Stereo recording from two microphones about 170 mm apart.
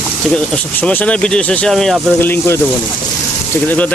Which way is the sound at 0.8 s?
10° left (ahead or behind).